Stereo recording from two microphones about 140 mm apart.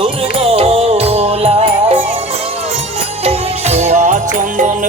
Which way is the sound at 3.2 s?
50° right (ahead or behind).